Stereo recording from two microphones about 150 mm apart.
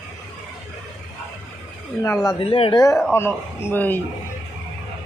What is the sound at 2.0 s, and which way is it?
Speech, 20° left (ahead or behind).